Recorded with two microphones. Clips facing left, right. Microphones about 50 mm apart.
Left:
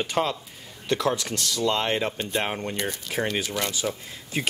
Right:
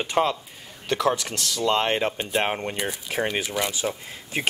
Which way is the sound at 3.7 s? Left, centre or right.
Right.